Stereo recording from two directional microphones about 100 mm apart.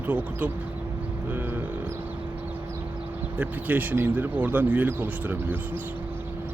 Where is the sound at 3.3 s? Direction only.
15° right (ahead or behind).